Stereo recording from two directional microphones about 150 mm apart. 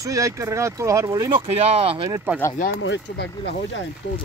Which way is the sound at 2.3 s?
15° right (ahead or behind).